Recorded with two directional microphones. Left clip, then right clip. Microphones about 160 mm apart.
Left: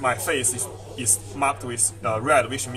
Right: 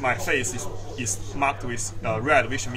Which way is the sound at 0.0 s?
30° left (ahead or behind).